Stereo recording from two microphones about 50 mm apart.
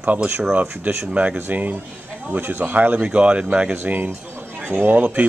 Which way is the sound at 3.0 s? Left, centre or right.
Right.